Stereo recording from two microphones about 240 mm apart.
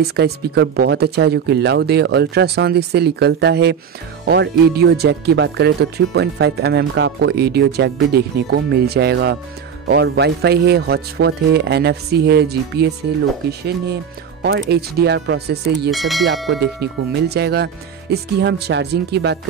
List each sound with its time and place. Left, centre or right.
0.1 s speech: right
15.9 s speech: centre
16.4 s speech: right